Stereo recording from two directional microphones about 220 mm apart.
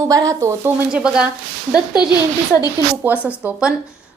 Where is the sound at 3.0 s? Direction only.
5° right (ahead or behind).